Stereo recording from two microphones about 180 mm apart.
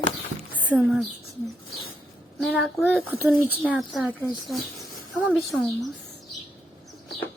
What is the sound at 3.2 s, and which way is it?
A woman's voice, 10° right (ahead or behind).